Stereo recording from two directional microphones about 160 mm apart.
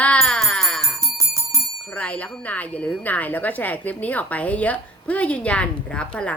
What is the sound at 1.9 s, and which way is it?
Speech, 10° left (ahead or behind).